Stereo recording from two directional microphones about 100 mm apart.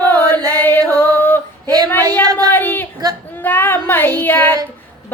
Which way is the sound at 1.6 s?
40° right (ahead or behind).